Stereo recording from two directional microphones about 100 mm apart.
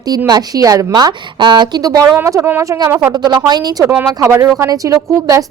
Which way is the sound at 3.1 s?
45° right (ahead or behind).